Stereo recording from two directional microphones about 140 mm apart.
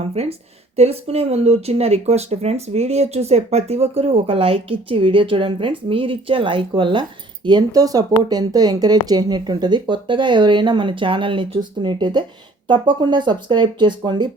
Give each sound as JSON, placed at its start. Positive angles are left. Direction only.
{"t": 0.0, "sound": "speech", "side_deg": -45}